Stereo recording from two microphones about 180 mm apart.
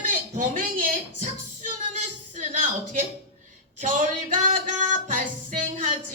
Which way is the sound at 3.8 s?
45° right (ahead or behind).